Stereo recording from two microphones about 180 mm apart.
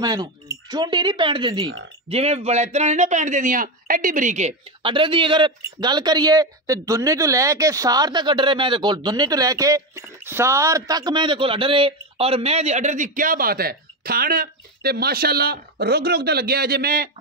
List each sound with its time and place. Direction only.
0.0 s speech: 25° right (ahead or behind); by 17.1 s 55° right (ahead or behind)